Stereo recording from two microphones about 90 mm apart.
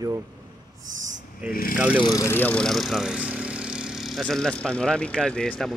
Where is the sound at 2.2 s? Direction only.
25° left (ahead or behind).